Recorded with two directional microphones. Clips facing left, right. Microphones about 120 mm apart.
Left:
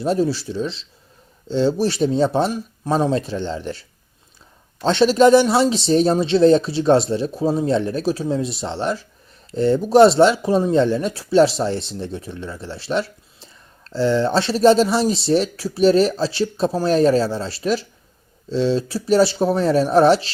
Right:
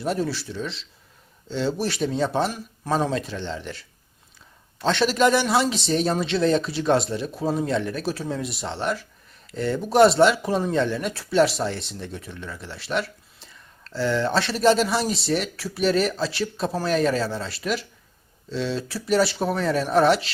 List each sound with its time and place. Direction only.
0.0 s speech: 30° left (ahead or behind)
8.1 s speech: 20° left (ahead or behind)